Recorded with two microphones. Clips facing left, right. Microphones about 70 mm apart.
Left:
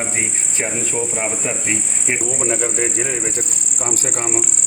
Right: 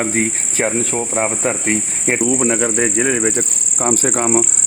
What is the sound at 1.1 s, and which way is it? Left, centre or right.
Speech, right.